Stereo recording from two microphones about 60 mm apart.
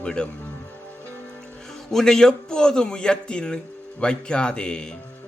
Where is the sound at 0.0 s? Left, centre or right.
Centre.